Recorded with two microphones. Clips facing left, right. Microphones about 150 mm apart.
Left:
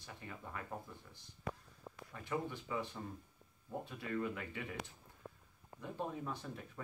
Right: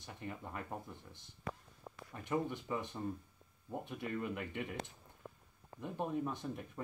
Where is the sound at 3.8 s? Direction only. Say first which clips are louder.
Even; 20° right (ahead or behind).